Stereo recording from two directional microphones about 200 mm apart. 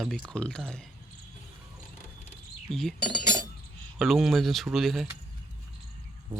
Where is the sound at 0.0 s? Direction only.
Centre (ahead or behind).